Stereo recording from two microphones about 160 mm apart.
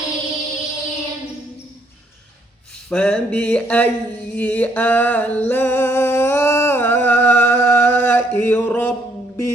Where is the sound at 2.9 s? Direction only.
5° left (ahead or behind).